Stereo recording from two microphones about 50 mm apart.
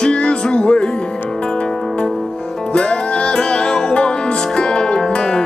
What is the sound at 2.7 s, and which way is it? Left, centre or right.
Music, centre.